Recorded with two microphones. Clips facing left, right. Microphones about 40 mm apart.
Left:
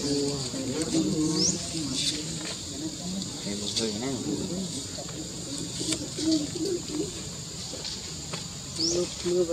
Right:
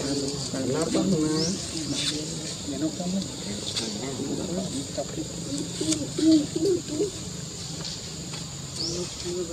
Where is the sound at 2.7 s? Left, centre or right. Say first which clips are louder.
Right 10 dB; right.